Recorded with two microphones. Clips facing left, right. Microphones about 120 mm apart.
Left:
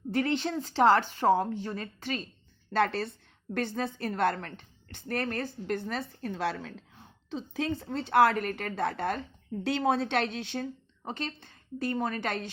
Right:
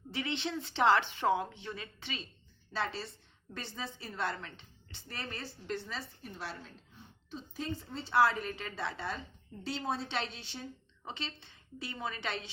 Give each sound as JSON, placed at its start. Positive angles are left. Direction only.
{"t": 0.1, "sound": "a woman's voice", "side_deg": 45}
{"t": 2.7, "sound": "a woman's voice", "side_deg": 60}
{"t": 6.2, "sound": "a woman's voice", "side_deg": 90}